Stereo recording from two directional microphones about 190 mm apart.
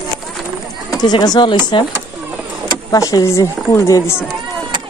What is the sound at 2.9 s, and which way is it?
Speech, 20° left (ahead or behind).